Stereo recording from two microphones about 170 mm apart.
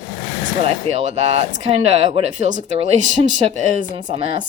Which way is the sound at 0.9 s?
35° right (ahead or behind).